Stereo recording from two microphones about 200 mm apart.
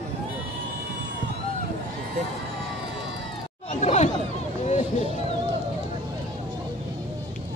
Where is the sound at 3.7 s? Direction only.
35° left (ahead or behind).